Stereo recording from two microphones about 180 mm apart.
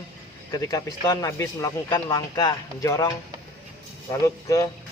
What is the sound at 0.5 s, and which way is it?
Speech, 20° left (ahead or behind).